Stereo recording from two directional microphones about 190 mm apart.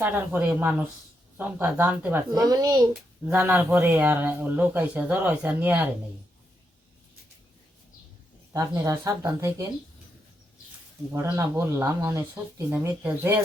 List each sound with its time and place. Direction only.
0.0 s speech: 10° right (ahead or behind)
2.3 s a woman's voice: 20° right (ahead or behind)
3.2 s speech: 10° right (ahead or behind)
8.5 s speech: 15° right (ahead or behind)
11.1 s speech: 15° right (ahead or behind)